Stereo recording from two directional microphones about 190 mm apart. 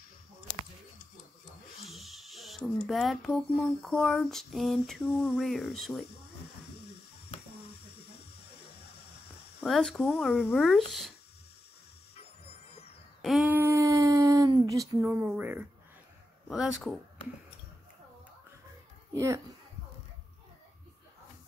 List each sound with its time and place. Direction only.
1.9 s speech: centre (ahead or behind)
9.7 s speech: centre (ahead or behind)
13.2 s a sound: centre (ahead or behind)
16.4 s speech: centre (ahead or behind)
19.1 s speech: 15° right (ahead or behind)